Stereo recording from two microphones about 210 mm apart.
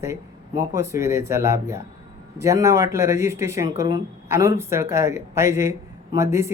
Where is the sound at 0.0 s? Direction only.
15° right (ahead or behind).